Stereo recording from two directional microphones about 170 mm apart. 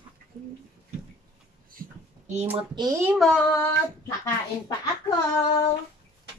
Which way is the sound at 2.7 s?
20° right (ahead or behind).